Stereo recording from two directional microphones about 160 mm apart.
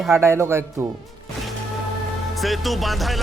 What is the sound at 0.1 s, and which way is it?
Speech, 15° right (ahead or behind).